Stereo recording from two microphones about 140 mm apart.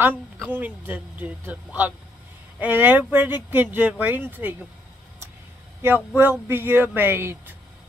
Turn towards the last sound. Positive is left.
turn(degrees=-15)  # may be behind; listen again after turning